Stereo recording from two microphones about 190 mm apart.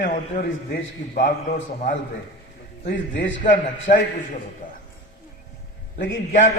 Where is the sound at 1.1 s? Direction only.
40° left (ahead or behind).